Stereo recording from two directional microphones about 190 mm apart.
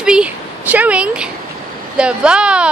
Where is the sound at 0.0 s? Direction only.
5° right (ahead or behind).